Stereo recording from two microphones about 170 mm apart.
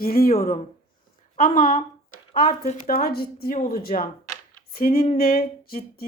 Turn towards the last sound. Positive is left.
turn(degrees=60)  # may be behind; listen again after turning